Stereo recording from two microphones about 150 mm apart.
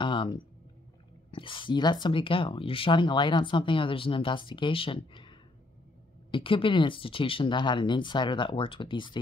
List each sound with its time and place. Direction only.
0.0 s a sound: 30° left (ahead or behind)
1.3 s speech: 35° left (ahead or behind)
6.3 s speech: 35° left (ahead or behind)